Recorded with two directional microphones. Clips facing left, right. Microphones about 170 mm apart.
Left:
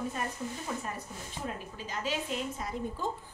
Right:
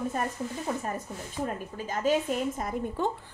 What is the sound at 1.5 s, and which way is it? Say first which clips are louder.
Speech: right 6 dB; 50° right (ahead or behind).